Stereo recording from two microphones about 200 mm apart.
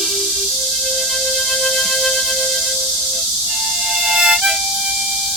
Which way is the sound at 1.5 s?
Centre (ahead or behind).